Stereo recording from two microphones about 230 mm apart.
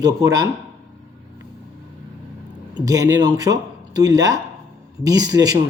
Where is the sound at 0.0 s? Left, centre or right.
Centre.